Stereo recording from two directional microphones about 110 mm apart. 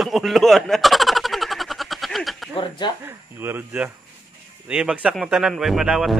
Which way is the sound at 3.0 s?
20° right (ahead or behind).